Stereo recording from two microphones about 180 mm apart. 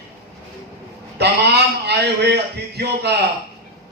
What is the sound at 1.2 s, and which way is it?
A man's voice, 65° right (ahead or behind).